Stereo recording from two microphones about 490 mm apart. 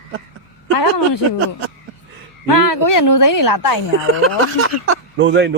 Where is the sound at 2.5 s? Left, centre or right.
Left.